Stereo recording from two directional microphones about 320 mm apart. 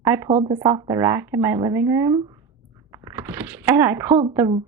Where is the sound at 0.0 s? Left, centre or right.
Centre.